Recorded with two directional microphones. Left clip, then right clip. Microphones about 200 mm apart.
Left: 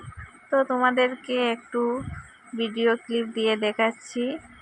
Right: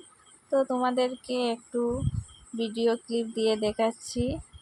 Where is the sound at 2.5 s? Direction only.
30° left (ahead or behind).